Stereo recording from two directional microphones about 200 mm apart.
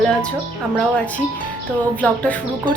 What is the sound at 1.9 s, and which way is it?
Speech, 5° left (ahead or behind).